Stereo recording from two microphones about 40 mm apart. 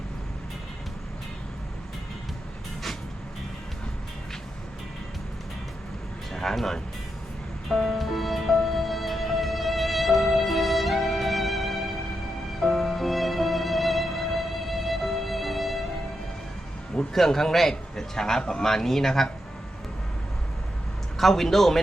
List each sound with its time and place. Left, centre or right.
6.3 s music: centre
12.7 s music: centre
17.2 s a man's voice: centre
21.2 s a man's voice: centre